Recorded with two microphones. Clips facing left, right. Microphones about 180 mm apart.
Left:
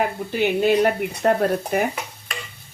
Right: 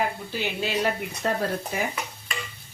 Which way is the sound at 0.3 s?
55° left (ahead or behind).